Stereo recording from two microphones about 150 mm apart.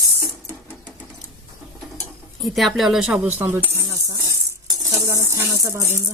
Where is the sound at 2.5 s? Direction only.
Centre (ahead or behind).